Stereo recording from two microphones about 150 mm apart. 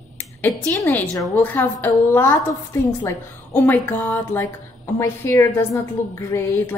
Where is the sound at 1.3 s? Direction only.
15° left (ahead or behind).